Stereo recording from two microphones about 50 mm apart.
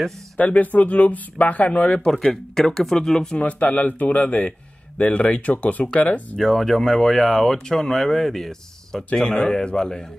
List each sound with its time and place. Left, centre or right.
0.4 s speech: left
1.7 s speech: left
2.5 s speech: centre
3.3 s speech: left
6.3 s speech: centre